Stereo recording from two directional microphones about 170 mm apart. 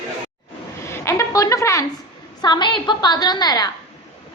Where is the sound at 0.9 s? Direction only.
15° left (ahead or behind).